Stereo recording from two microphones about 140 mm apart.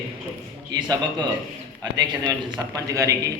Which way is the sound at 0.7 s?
30° right (ahead or behind).